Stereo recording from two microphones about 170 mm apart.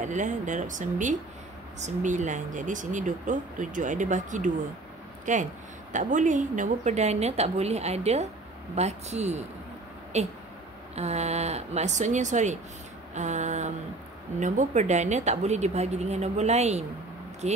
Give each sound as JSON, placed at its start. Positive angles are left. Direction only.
{"t": 0.0, "sound": "a woman's voice", "side_deg": -45}